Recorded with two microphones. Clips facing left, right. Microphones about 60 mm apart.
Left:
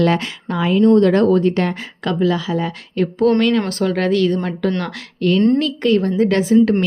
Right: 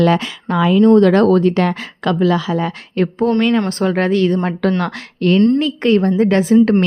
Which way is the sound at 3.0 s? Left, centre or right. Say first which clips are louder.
Right 2 dB; right.